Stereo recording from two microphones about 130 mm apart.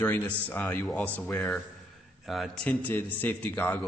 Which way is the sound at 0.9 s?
Centre (ahead or behind).